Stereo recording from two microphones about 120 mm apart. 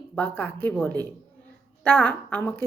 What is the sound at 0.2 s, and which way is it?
A woman's voice, 15° left (ahead or behind).